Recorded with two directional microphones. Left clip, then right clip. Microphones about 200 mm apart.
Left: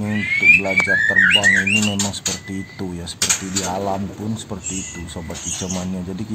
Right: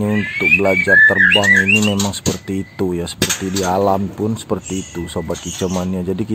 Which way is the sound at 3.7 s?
30° right (ahead or behind).